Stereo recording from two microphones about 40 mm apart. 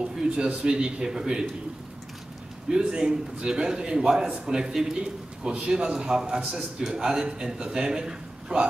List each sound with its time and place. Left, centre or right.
0.5 s a man's voice: right
2.7 s a man's voice: centre